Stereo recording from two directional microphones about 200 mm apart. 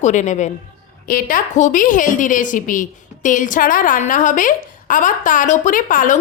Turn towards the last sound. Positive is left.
turn(degrees=40)  # may be behind; listen again after turning